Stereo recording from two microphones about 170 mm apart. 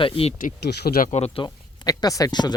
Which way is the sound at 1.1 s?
40° left (ahead or behind).